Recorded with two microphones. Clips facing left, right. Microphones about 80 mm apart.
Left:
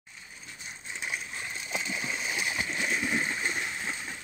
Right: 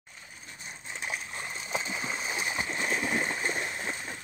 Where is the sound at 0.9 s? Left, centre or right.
Right.